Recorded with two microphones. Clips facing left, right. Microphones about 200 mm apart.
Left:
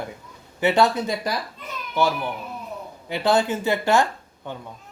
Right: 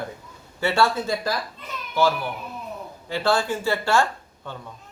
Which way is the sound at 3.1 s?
20° left (ahead or behind).